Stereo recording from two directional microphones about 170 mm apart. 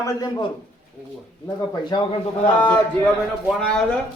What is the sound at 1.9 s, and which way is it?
Speech, 25° left (ahead or behind).